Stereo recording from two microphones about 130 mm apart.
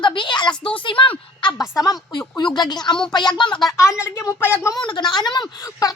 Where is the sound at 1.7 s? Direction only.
25° left (ahead or behind).